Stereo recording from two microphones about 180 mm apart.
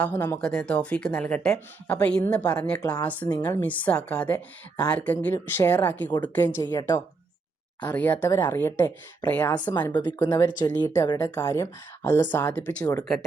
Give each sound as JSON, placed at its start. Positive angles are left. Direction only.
{"t": 0.0, "sound": "speech", "side_deg": 10}
{"t": 8.4, "sound": "speech", "side_deg": 20}
{"t": 8.6, "sound": "speech", "side_deg": 10}